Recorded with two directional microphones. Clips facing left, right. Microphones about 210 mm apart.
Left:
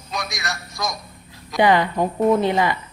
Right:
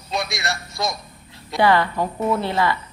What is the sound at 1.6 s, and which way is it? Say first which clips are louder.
A woman's voice: left 1 dB; 15° left (ahead or behind).